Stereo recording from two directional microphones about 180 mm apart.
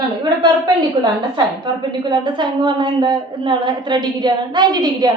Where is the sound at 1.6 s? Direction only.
25° right (ahead or behind).